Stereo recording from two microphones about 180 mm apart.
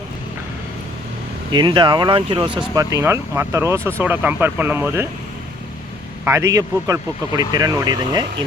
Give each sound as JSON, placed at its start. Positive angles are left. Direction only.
{"t": 1.5, "sound": "a man's voice", "side_deg": -25}
{"t": 2.7, "sound": "speech", "side_deg": -15}
{"t": 6.2, "sound": "a man's voice", "side_deg": -15}